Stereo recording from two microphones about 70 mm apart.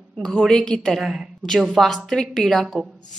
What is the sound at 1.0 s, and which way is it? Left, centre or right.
A woman's voice, centre.